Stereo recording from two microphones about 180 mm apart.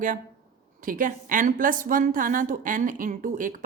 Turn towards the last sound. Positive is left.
turn(degrees=-50)  # may be behind; listen again after turning